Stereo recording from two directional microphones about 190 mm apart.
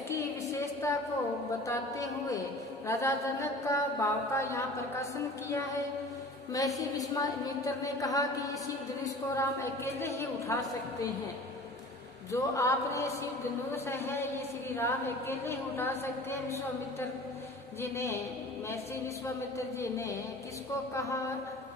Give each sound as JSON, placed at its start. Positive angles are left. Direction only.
{"t": 0.1, "sound": "a sound", "side_deg": 15}
{"t": 1.7, "sound": "a woman's voice", "side_deg": 20}
{"t": 6.5, "sound": "a woman's voice", "side_deg": 15}
{"t": 12.3, "sound": "a woman's voice", "side_deg": 15}
{"t": 17.9, "sound": "a woman's voice", "side_deg": 15}
{"t": 19.2, "sound": "a woman's voice", "side_deg": 15}